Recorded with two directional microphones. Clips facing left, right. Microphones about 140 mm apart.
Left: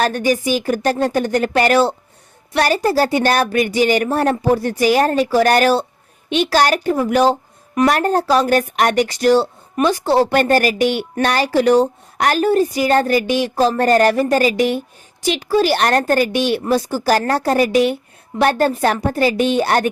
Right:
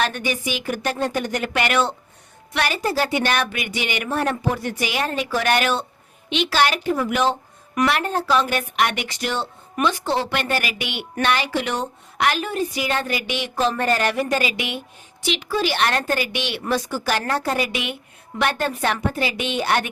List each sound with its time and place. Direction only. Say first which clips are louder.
0.0 s speech: left 7 dB; 40° left (ahead or behind)